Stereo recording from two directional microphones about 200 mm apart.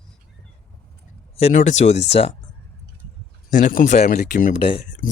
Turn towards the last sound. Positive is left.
turn(degrees=40)  # may be behind; listen again after turning